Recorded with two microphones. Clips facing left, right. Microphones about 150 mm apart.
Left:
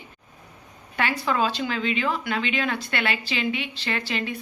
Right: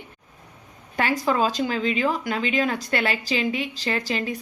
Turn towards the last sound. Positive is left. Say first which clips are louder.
# right 3 dB
turn(degrees=-40)  # may be behind; listen again after turning